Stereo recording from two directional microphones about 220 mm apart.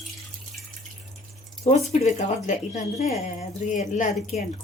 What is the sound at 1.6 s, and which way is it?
A woman's voice, 30° left (ahead or behind).